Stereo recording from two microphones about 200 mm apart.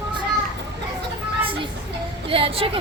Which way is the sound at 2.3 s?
30° right (ahead or behind).